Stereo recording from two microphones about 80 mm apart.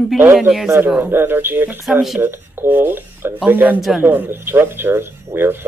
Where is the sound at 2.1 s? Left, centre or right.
Right.